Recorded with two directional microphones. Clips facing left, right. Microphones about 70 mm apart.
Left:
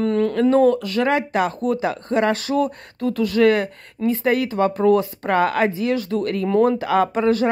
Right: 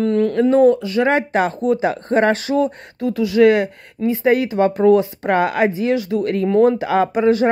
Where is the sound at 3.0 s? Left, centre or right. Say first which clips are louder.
Right 3 dB; centre.